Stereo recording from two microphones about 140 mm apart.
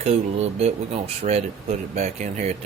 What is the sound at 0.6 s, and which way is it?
Speech, 45° right (ahead or behind).